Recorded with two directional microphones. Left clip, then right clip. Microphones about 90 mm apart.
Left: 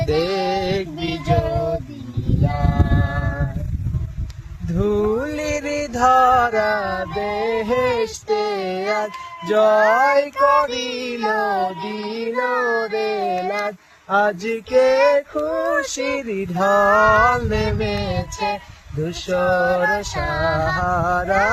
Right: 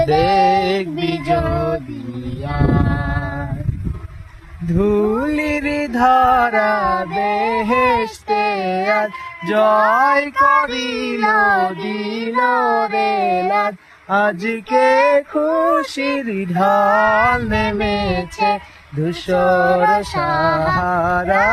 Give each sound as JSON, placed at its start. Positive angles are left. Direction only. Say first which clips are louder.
{"t": 0.1, "sound": "a sound", "louder": "right 6 dB", "side_deg": 25}
{"t": 0.5, "sound": "music", "louder": "right 5 dB", "side_deg": 55}
{"t": 1.3, "sound": "music", "louder": "right 2 dB", "side_deg": 25}
{"t": 1.5, "sound": "music", "louder": "right 2 dB", "side_deg": 0}
{"t": 2.4, "sound": "a sound", "louder": "right 4 dB", "side_deg": 0}
{"t": 4.7, "sound": "female singing", "louder": "right 4 dB", "side_deg": 20}
{"t": 4.9, "sound": "mantra", "louder": "right 3 dB", "side_deg": 10}
{"t": 9.5, "sound": "female singing", "louder": "right 1 dB", "side_deg": 30}
{"t": 10.3, "sound": "child singing", "louder": "right 2 dB", "side_deg": 10}
{"t": 12.5, "sound": "child singing", "louder": "right 4 dB", "side_deg": 15}
{"t": 14.1, "sound": "female singing", "louder": "right 1 dB", "side_deg": 35}
{"t": 16.3, "sound": "a sound", "louder": "right 1 dB", "side_deg": 35}
{"t": 16.6, "sound": "female singing", "louder": "right 1 dB", "side_deg": 25}